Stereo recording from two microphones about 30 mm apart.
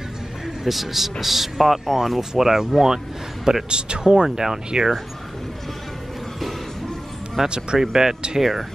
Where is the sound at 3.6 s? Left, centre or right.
Right.